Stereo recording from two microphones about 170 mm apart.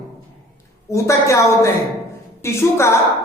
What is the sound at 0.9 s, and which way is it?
A woman's voice, 15° left (ahead or behind).